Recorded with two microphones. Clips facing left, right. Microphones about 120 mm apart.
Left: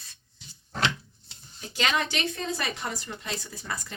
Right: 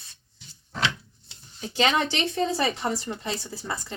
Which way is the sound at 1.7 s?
25° right (ahead or behind).